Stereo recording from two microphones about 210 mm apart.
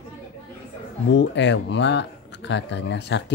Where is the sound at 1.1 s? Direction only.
60° left (ahead or behind).